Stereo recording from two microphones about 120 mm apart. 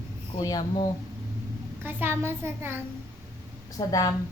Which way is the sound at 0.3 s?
30° left (ahead or behind).